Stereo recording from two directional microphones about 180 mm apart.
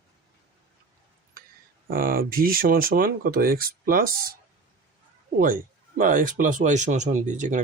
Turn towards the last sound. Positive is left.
turn(degrees=-45)  # may be behind; listen again after turning